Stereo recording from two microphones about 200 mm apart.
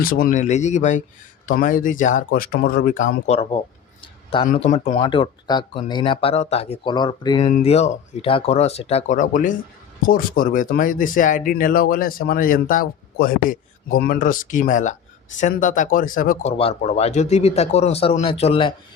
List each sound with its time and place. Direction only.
0.0 s speech: 45° left (ahead or behind)
4.0 s a sound: 25° left (ahead or behind)
4.4 s speech: 35° left (ahead or behind)
4.9 s speech: 25° left (ahead or behind)
7.4 s speech: 30° left (ahead or behind)
16.5 s speech: 30° left (ahead or behind)